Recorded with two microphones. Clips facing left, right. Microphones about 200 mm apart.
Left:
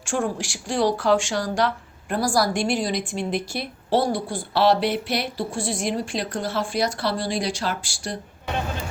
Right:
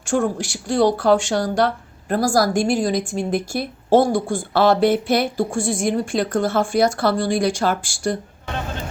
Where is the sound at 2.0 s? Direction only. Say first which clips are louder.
Right 4 dB; 45° right (ahead or behind).